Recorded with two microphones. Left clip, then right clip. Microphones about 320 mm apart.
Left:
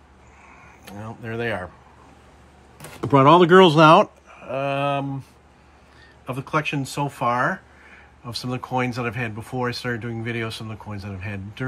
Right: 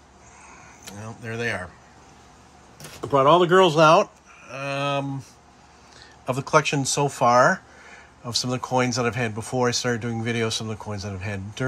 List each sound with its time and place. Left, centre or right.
0.5 s a sound: centre
3.1 s speech: left; by 5.0 s centre
6.2 s speech: centre